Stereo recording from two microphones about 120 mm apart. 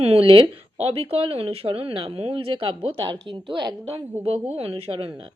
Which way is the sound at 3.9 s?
55° right (ahead or behind).